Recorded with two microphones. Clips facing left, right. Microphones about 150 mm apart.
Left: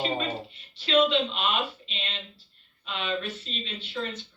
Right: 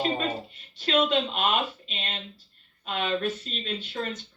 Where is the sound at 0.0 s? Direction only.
45° right (ahead or behind).